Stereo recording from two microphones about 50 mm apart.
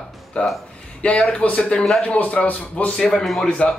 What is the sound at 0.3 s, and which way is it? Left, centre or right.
A man's voice, left.